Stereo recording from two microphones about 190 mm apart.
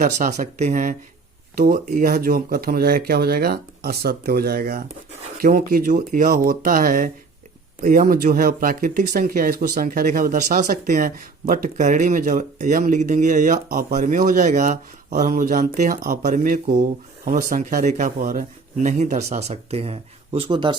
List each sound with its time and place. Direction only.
0.0 s speech: 40° right (ahead or behind)